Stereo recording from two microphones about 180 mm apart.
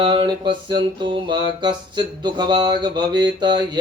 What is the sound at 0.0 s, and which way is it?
Music, 25° right (ahead or behind).